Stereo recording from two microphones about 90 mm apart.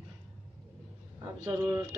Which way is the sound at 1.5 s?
40° right (ahead or behind).